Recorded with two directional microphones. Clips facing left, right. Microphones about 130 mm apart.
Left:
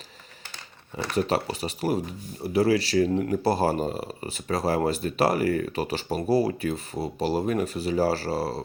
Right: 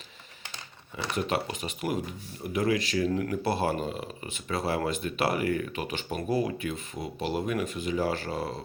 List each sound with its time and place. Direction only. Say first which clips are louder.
1.1 s speech: left 5 dB; 35° left (ahead or behind)